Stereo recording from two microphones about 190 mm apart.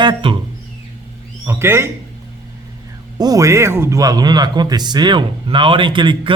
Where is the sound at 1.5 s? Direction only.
15° right (ahead or behind).